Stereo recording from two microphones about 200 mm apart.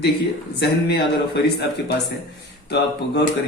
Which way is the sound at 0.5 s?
55° left (ahead or behind).